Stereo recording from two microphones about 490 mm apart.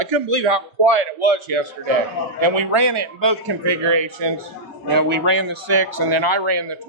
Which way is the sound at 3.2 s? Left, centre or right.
Right.